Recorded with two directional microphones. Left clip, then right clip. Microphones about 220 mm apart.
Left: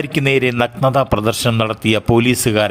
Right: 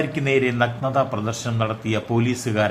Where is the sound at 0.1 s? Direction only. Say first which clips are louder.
Left 5 dB; 45° left (ahead or behind).